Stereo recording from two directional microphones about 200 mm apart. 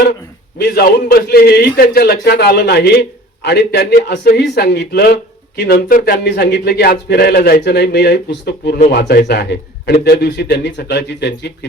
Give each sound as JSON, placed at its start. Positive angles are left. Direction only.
{"t": 0.6, "sound": "a man's voice", "side_deg": 55}